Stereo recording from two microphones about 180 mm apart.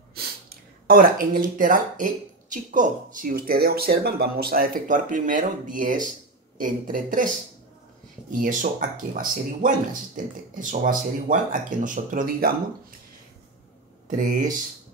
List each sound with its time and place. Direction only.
0.1 s speech: 60° right (ahead or behind)
14.0 s speech: 45° right (ahead or behind)